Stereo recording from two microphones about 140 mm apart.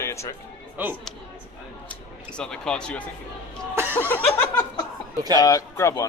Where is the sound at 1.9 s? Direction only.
5° left (ahead or behind).